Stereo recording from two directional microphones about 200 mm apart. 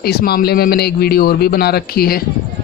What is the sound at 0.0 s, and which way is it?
A man's voice, 50° left (ahead or behind).